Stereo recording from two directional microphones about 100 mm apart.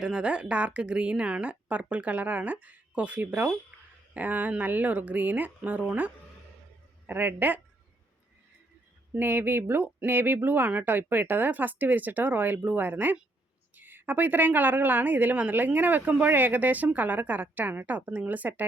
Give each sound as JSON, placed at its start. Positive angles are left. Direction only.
{"t": 0.0, "sound": "a woman's voice", "side_deg": -10}
{"t": 9.1, "sound": "a woman's voice", "side_deg": -20}